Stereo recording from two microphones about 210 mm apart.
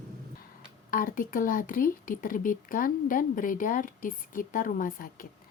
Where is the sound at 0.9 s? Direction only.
40° left (ahead or behind).